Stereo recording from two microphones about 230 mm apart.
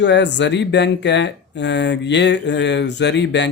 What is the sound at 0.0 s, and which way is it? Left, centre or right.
Speech, left.